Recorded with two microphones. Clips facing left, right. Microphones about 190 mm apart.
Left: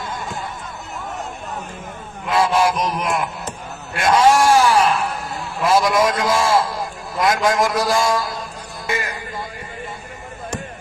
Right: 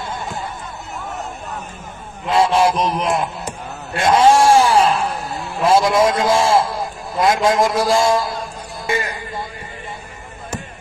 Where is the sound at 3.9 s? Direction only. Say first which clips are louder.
Right 2 dB; 25° right (ahead or behind).